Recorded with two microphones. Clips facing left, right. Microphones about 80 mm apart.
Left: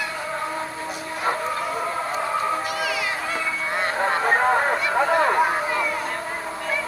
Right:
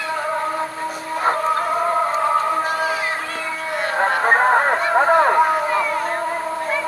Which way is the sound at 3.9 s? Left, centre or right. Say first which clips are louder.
Right 5 dB; right.